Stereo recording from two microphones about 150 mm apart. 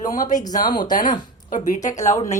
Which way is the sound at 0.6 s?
30° left (ahead or behind).